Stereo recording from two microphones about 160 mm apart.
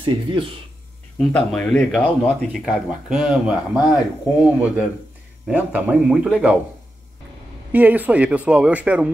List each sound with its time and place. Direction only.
0.0 s speech: 30° right (ahead or behind)
1.1 s speech: 5° left (ahead or behind)
7.7 s speech: 10° right (ahead or behind)